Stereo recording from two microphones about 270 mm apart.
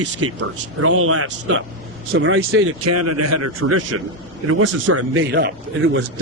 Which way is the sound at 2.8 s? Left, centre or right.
Right.